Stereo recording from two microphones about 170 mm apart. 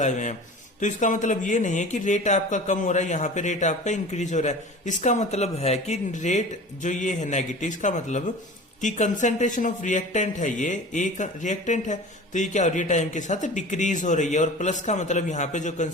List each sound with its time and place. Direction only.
0.0 s a man's voice: 45° left (ahead or behind)